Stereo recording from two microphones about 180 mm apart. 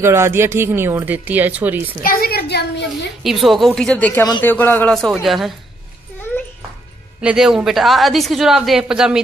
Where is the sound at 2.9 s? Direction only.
Centre (ahead or behind).